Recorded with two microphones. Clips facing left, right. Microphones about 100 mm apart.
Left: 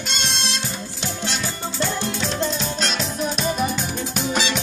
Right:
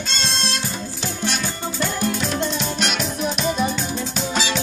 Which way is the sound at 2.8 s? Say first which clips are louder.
Right 1 dB; 30° left (ahead or behind).